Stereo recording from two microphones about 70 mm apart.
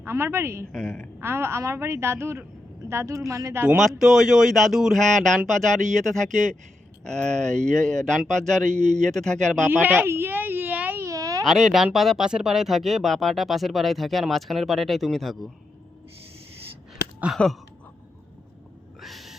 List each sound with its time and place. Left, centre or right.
0.0 s a woman's voice: right
0.7 s a man's voice: centre
1.2 s a woman's voice: right
3.8 s a man's voice: centre
9.6 s a woman's voice: right
10.1 s a sound: right
11.0 s a sound: right
11.4 s speech: centre
17.3 s speech: centre
19.0 s cat: centre